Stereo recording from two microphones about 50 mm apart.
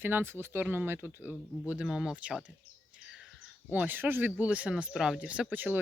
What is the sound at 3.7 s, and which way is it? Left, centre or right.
Speech, right.